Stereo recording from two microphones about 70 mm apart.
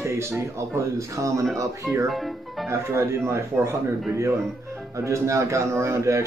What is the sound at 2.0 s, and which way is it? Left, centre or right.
Speech, centre.